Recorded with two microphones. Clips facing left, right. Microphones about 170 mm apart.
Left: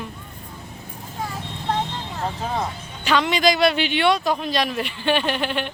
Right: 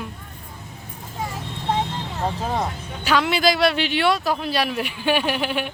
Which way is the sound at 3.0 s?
5° right (ahead or behind).